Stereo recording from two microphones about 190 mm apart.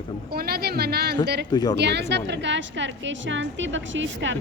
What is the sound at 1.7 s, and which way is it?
A woman's voice, 60° right (ahead or behind).